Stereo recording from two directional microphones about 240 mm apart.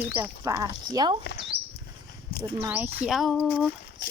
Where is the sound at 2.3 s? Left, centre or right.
Left.